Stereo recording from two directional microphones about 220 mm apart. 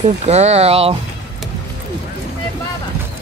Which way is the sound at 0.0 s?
30° right (ahead or behind).